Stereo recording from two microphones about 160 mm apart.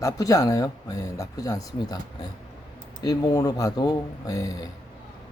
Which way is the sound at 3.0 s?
20° left (ahead or behind).